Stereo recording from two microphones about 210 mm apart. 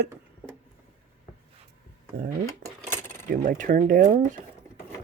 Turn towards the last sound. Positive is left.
turn(degrees=-35)  # may be behind; listen again after turning